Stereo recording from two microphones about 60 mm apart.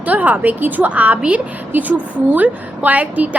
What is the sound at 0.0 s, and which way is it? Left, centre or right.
A woman's voice, right.